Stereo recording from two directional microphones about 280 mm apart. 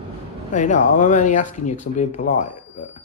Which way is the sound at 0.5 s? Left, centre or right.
Left.